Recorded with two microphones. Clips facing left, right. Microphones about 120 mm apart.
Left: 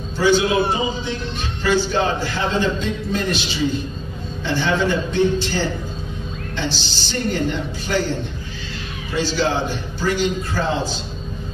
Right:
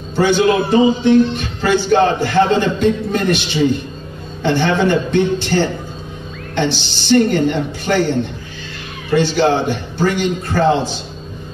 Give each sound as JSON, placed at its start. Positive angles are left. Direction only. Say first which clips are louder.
{"t": 0.1, "sound": "a man's voice", "louder": "right 3 dB", "side_deg": -60}
{"t": 9.1, "sound": "a man's voice", "louder": "right 7 dB", "side_deg": -60}